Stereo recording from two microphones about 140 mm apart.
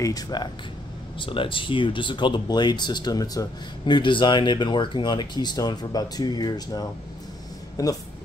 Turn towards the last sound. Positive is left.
turn(degrees=25)  # may be behind; listen again after turning